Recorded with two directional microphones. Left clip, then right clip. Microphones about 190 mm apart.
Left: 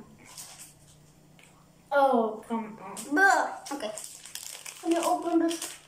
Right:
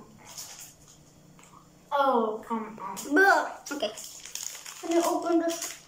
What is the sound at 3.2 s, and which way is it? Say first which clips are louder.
Speech: right 1 dB; 5° right (ahead or behind).